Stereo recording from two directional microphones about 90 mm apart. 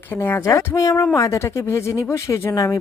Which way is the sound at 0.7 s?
40° left (ahead or behind).